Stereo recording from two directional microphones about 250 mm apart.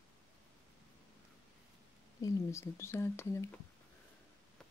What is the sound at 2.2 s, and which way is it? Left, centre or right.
Speech, centre.